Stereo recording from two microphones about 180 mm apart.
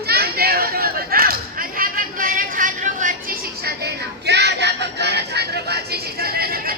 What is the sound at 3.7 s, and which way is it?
Music, 65° right (ahead or behind).